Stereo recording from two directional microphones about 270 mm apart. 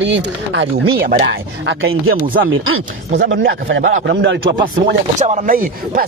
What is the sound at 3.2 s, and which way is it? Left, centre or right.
Speech, right.